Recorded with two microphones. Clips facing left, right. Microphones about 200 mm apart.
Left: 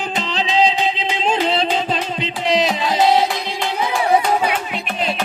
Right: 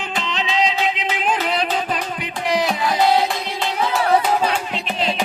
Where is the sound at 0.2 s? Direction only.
35° left (ahead or behind).